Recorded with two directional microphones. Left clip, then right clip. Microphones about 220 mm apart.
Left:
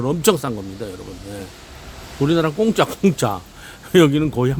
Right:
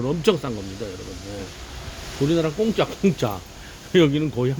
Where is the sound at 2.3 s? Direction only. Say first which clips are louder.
Left 4 dB; 30° left (ahead or behind).